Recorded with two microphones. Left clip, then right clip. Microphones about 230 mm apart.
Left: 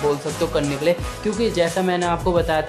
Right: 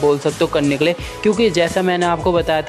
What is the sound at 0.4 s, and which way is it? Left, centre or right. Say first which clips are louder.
Speech: right 5 dB; right.